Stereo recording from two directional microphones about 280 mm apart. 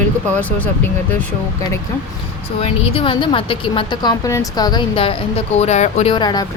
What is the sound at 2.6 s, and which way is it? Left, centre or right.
A woman's voice, left.